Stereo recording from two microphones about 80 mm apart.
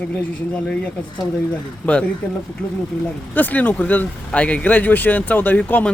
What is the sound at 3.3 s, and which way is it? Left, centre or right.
Speech, left.